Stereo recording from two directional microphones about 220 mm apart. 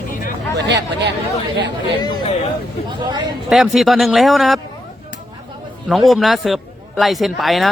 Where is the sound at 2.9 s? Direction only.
20° right (ahead or behind).